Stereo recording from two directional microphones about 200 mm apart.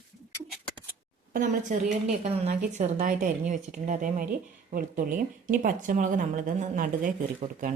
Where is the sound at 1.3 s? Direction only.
40° right (ahead or behind).